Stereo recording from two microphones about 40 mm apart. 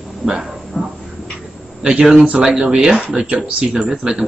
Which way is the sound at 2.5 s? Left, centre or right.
Centre.